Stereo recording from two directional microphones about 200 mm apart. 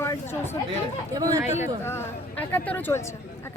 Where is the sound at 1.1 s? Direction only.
15° right (ahead or behind).